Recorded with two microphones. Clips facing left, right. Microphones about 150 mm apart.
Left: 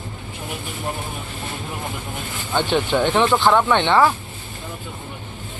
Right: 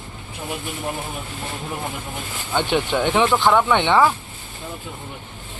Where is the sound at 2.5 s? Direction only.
10° right (ahead or behind).